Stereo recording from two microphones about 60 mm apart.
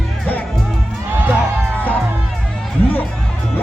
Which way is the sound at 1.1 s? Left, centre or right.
Right.